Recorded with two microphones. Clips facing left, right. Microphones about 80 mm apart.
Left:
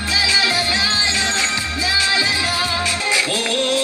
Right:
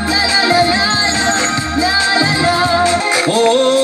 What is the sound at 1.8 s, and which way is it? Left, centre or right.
Music, right.